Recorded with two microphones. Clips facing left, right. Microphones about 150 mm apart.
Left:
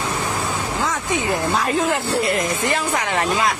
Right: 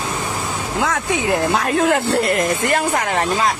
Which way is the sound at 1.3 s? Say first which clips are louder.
Right 3 dB; 65° right (ahead or behind).